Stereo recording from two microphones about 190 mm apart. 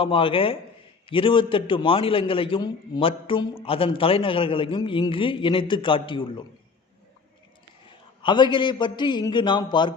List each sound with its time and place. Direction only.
0.0 s a man's voice: 30° left (ahead or behind)
7.9 s a man's voice: 25° left (ahead or behind)